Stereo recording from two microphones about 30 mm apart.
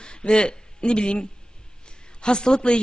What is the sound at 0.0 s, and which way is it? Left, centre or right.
A man's voice, left.